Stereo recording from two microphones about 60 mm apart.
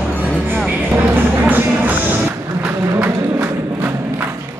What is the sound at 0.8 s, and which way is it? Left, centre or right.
Music, right.